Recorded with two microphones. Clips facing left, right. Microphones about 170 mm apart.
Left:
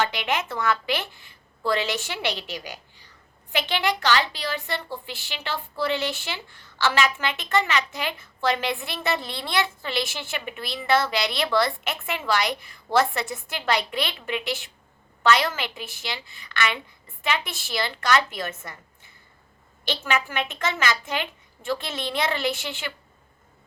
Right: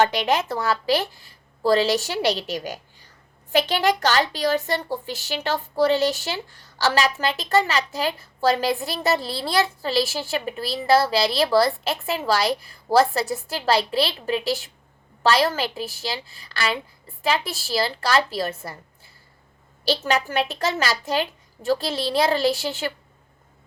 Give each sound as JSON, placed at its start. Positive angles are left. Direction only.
{"t": 0.0, "sound": "a woman's voice", "side_deg": -40}